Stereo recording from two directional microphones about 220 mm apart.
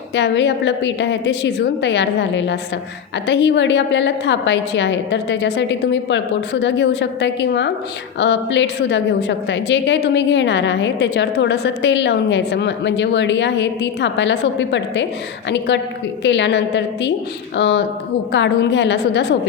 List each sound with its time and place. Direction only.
0.1 s a woman's voice: 50° left (ahead or behind)